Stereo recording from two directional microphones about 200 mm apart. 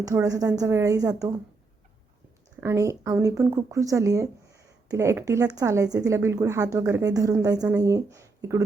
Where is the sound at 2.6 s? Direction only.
15° right (ahead or behind).